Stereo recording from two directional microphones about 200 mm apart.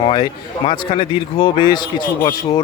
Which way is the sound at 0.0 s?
25° left (ahead or behind).